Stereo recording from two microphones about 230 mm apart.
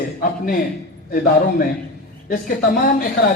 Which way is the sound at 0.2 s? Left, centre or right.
Left.